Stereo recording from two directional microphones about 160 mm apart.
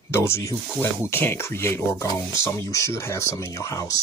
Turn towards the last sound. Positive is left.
turn(degrees=20)  # may be behind; listen again after turning